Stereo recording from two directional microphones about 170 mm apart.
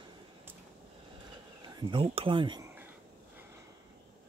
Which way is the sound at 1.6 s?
30° right (ahead or behind).